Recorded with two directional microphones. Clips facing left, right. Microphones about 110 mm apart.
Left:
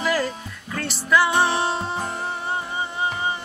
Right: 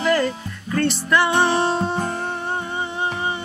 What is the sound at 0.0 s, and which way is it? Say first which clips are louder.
Music: right 4 dB; 5° left (ahead or behind).